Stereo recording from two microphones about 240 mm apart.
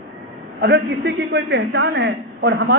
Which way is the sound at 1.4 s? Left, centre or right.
Right.